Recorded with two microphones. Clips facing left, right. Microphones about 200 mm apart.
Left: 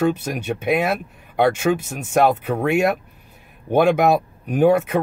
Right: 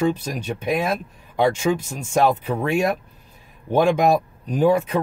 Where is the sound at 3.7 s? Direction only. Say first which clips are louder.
Left 1 dB; 65° left (ahead or behind).